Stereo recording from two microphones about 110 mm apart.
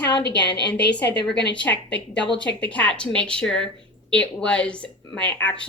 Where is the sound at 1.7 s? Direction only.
10° left (ahead or behind).